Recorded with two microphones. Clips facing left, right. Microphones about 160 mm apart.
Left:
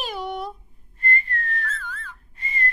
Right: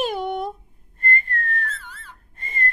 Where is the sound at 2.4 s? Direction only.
50° right (ahead or behind).